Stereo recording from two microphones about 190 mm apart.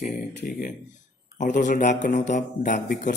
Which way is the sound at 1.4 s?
40° left (ahead or behind).